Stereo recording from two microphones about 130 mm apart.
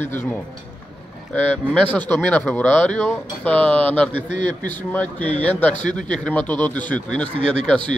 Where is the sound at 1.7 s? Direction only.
10° left (ahead or behind).